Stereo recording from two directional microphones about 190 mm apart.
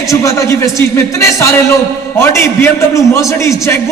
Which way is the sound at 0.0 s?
15° left (ahead or behind).